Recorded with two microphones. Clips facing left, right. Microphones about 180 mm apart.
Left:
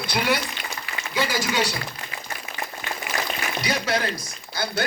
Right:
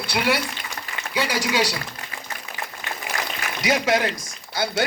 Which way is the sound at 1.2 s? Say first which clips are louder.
Right 2 dB; 80° right.